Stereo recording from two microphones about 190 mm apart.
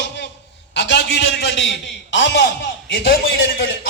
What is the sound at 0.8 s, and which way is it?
Speech, 70° left (ahead or behind).